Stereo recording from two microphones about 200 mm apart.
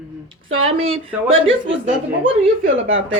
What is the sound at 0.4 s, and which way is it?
Speech, 90° right.